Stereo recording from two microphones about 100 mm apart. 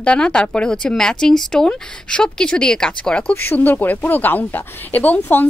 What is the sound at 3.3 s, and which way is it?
Speech, 20° left (ahead or behind).